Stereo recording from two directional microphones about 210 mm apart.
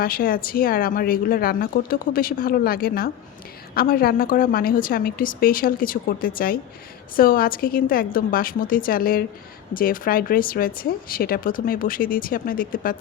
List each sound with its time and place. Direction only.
0.0 s speech: 45° left (ahead or behind)